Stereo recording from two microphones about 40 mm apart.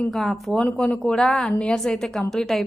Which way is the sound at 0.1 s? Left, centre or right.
Centre.